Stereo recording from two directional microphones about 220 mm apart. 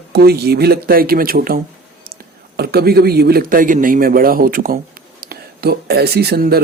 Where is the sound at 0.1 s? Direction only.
45° right (ahead or behind).